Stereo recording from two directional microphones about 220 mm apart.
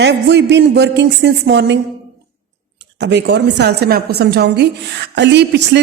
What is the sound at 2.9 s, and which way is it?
A woman's voice, 50° right (ahead or behind).